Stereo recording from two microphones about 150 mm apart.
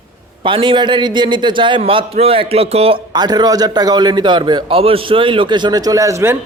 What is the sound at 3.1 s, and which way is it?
A man's voice, 25° right (ahead or behind).